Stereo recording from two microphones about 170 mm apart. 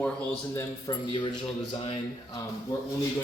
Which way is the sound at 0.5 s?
25° left (ahead or behind).